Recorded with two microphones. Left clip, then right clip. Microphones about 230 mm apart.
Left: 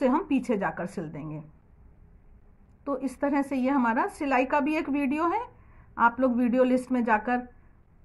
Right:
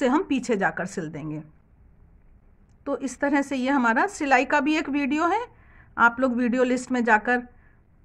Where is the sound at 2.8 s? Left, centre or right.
Right.